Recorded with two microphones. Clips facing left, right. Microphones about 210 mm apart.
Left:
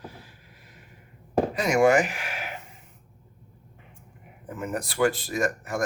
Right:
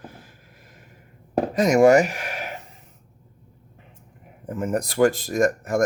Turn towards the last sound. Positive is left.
turn(degrees=-45)  # may be behind; listen again after turning